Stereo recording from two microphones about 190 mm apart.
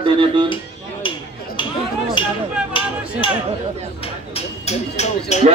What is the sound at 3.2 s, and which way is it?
Speech, 25° left (ahead or behind).